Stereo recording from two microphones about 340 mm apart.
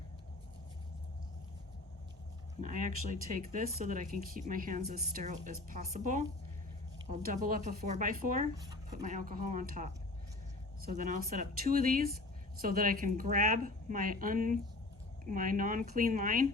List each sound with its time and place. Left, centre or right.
2.6 s speech: right
7.4 s speech: right